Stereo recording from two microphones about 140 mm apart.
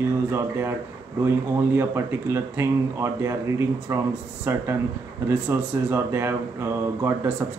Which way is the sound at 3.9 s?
20° right (ahead or behind).